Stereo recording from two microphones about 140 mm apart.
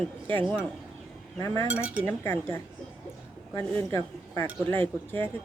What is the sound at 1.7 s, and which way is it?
Chink, 10° right (ahead or behind).